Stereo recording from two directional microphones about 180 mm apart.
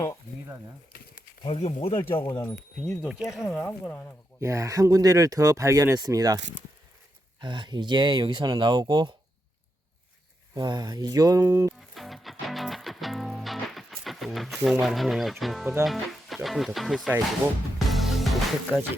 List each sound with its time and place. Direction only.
1.5 s speech: 30° left (ahead or behind)
2.5 s speech: 5° left (ahead or behind)
3.6 s speech: 10° left (ahead or behind)
4.4 s speech: 15° right (ahead or behind)
7.4 s speech: 25° right (ahead or behind)
10.5 s speech: 25° right (ahead or behind)
11.8 s music: centre (ahead or behind)
15.8 s speech: centre (ahead or behind)
17.8 s music: centre (ahead or behind)